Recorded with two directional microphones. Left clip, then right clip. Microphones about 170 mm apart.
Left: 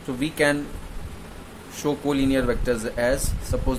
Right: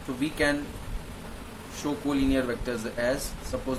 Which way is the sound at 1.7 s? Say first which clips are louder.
Left 5 dB; 55° left (ahead or behind).